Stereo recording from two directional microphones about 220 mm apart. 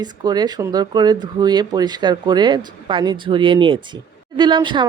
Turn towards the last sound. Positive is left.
turn(degrees=-20)  # may be behind; listen again after turning